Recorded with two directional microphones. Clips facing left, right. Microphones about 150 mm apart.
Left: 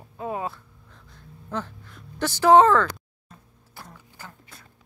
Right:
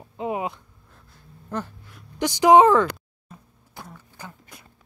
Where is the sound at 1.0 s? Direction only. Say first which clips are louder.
Right 1 dB; 10° right (ahead or behind).